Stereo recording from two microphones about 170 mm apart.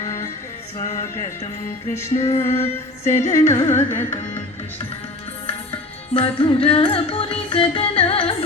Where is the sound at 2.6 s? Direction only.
45° left (ahead or behind).